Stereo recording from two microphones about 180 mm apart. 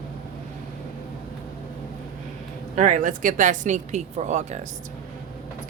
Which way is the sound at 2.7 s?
45° right (ahead or behind).